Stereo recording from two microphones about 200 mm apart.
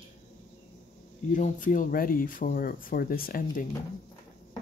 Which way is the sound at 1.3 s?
40° left (ahead or behind).